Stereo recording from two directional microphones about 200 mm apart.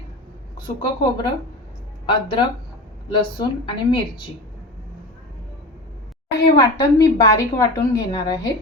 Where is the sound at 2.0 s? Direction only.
25° left (ahead or behind).